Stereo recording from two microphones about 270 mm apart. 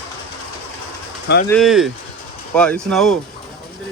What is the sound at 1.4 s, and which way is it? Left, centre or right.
Speech, centre.